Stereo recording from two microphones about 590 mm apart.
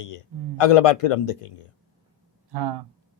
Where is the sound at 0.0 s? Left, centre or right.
Left.